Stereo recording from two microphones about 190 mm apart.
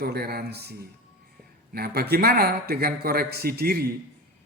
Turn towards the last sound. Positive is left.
turn(degrees=-55)  # may be behind; listen again after turning